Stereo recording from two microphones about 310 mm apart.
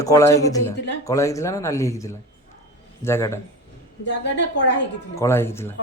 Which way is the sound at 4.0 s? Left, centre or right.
Left.